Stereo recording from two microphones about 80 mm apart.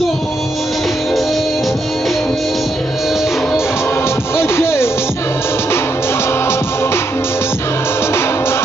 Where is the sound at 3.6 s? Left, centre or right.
Left.